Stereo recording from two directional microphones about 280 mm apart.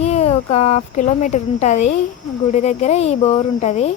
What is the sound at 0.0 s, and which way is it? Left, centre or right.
Speech, left.